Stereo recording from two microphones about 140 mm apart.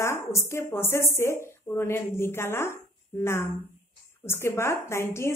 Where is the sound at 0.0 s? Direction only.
20° left (ahead or behind).